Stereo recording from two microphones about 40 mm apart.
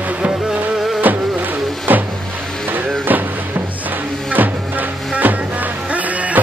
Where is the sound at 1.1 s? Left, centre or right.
Right.